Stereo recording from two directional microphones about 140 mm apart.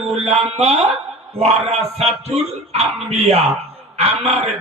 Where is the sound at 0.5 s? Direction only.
50° right (ahead or behind).